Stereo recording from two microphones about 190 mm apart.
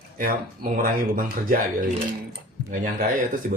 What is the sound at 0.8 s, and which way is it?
Speech, 45° right (ahead or behind).